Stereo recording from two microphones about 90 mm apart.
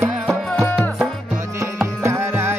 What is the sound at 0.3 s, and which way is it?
Music, centre (ahead or behind).